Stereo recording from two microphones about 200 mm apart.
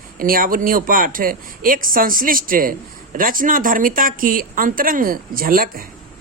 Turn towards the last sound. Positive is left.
turn(degrees=-45)  # may be behind; listen again after turning